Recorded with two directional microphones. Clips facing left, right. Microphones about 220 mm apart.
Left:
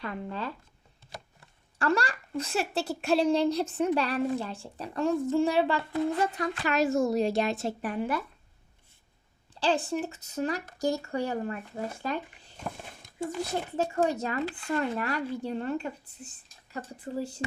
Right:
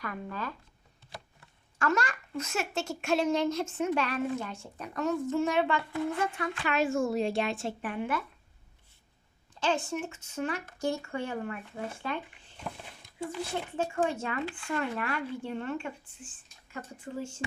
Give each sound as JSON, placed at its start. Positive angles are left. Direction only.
{"t": 0.0, "sound": "speech", "side_deg": 25}
{"t": 1.8, "sound": "speech", "side_deg": 35}
{"t": 9.6, "sound": "speech", "side_deg": 35}